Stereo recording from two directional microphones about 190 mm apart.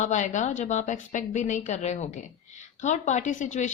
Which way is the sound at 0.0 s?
40° left (ahead or behind).